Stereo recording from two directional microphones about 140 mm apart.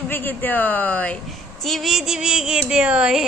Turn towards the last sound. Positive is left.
turn(degrees=-5)  # may be behind; listen again after turning